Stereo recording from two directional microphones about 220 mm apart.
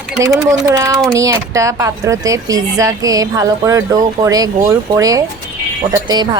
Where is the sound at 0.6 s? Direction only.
15° right (ahead or behind).